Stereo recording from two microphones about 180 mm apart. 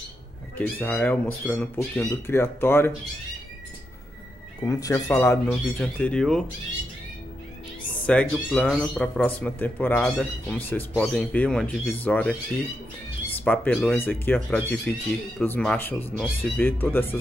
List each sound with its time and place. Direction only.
0.6 s a man's voice: 10° left (ahead or behind)
4.6 s a man's voice: 20° left (ahead or behind)
5.5 s speech: 5° left (ahead or behind)
8.1 s a man's voice: 5° left (ahead or behind)
13.4 s a man's voice: 10° left (ahead or behind)